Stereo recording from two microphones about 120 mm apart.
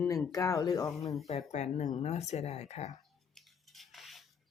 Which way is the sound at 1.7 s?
75° left (ahead or behind).